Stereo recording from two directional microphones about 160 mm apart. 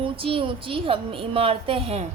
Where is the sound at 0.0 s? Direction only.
35° right (ahead or behind).